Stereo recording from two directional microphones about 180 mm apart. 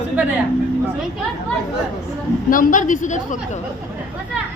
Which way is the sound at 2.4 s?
50° left (ahead or behind).